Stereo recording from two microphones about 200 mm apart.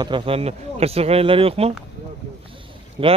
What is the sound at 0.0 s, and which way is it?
Speech, 25° right (ahead or behind).